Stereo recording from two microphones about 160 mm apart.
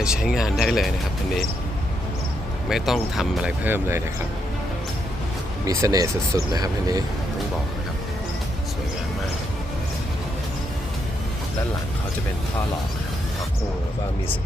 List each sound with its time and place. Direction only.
0.0 s speech: 5° right (ahead or behind)
2.6 s speech: centre (ahead or behind)
5.6 s speech: 20° right (ahead or behind)